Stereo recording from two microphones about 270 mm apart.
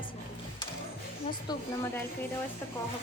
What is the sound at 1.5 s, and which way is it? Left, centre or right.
Speech, centre.